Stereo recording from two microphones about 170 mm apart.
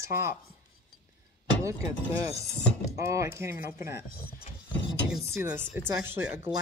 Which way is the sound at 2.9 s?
15° right (ahead or behind).